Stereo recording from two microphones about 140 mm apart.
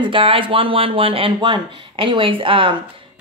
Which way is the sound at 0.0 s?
40° right (ahead or behind).